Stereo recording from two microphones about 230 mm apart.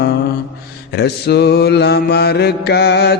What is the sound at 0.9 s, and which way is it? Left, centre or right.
Mantra, left.